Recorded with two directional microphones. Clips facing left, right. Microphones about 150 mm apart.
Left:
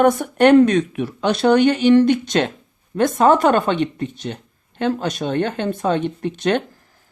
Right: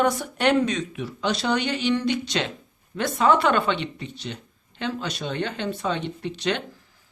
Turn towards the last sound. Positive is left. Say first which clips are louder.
# left 7 dB
turn(degrees=50)  # may be behind; listen again after turning